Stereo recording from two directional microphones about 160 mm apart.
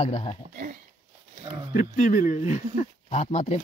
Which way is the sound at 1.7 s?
50° left (ahead or behind).